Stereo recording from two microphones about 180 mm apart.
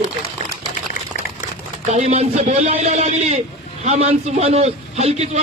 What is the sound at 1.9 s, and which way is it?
A man's voice, 40° right (ahead or behind).